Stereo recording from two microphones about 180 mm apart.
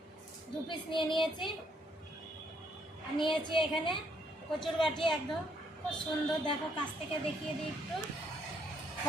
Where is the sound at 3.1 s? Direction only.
25° left (ahead or behind).